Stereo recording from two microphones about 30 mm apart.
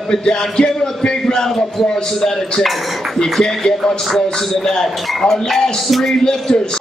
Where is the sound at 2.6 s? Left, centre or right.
Centre.